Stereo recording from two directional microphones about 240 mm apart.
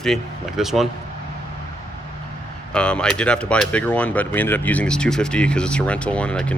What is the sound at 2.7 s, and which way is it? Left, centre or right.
Speech, centre.